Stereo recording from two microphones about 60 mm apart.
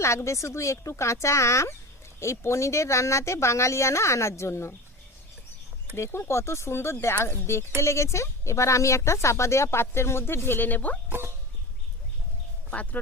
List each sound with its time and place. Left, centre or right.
0.0 s speech: left
6.0 s speech: left
11.1 s dog: right
12.7 s speech: left